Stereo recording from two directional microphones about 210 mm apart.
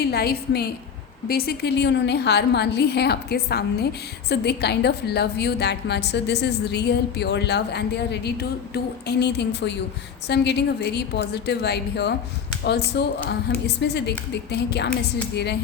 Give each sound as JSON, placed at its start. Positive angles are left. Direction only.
{"t": 0.0, "sound": "a woman's voice", "side_deg": 50}